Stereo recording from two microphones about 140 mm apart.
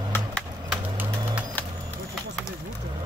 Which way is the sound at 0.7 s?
10° right (ahead or behind).